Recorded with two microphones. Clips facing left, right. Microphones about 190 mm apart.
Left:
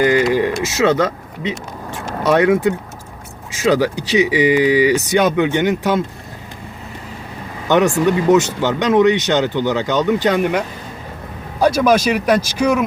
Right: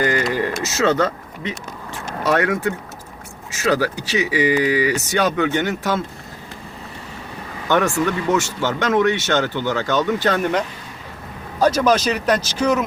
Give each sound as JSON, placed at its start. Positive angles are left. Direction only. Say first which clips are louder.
{"t": 0.0, "sound": "a sound", "louder": "left 6 dB", "side_deg": 15}
{"t": 2.2, "sound": "speech", "louder": "left 6 dB", "side_deg": 20}
{"t": 7.7, "sound": "speech", "louder": "left 5 dB", "side_deg": 15}
{"t": 11.6, "sound": "speech", "louder": "left 3 dB", "side_deg": 10}